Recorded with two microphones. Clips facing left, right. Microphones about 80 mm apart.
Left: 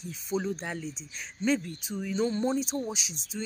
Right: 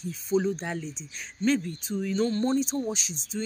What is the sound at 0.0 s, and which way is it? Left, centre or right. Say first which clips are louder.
Speech: right 6 dB; centre.